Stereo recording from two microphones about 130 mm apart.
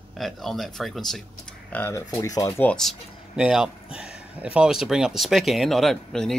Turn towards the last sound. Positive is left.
turn(degrees=0)  # may be behind; listen again after turning